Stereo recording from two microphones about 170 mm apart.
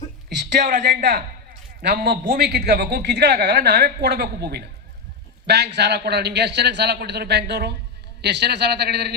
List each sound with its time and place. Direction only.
0.8 s a man's voice: 90° right
1.8 s a man's voice: 80° right